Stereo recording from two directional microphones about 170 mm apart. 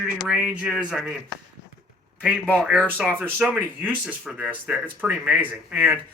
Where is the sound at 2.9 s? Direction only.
10° right (ahead or behind).